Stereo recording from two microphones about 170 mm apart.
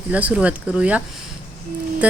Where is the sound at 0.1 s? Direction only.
10° right (ahead or behind).